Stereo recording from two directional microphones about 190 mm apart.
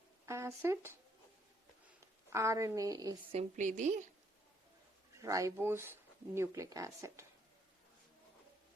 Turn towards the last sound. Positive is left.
turn(degrees=-15)  # may be behind; listen again after turning